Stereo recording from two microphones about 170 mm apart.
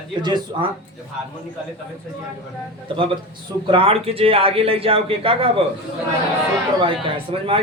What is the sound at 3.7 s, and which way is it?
Speech, 35° right (ahead or behind).